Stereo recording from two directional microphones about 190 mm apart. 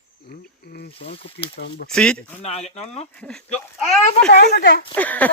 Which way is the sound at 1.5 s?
60° left (ahead or behind).